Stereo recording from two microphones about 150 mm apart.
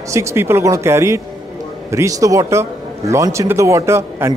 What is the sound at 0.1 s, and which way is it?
A man's voice, 20° right (ahead or behind).